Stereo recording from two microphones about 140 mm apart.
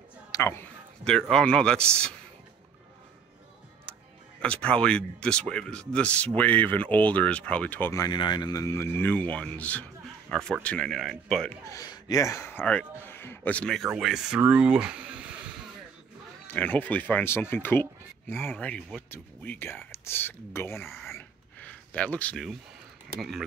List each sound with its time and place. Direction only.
0.3 s a sound: 20° left (ahead or behind)
1.3 s speech: 5° left (ahead or behind)
4.4 s speech: 5° left (ahead or behind)
7.9 s speech: 25° left (ahead or behind); by 11.5 s centre (ahead or behind)
11.7 s a man's voice: 25° left (ahead or behind); by 13.8 s 5° left (ahead or behind)
13.8 s speech: 5° right (ahead or behind)
16.4 s speech: 10° left (ahead or behind)
20.7 s speech: centre (ahead or behind)
21.2 s a sound: 10° left (ahead or behind)